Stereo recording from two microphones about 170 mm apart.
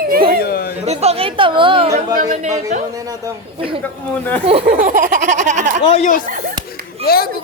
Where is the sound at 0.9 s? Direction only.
40° right (ahead or behind).